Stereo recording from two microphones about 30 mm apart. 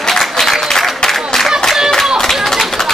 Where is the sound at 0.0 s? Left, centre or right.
Centre.